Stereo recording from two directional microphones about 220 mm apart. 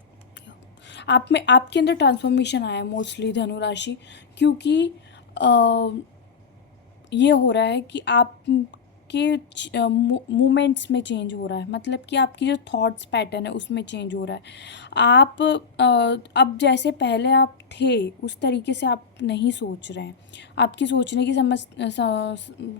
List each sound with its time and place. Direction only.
0.9 s a woman's voice: 55° left (ahead or behind)
7.1 s a woman's voice: 55° left (ahead or behind)